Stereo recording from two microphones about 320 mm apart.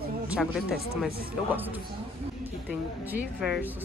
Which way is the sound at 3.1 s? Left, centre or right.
Centre.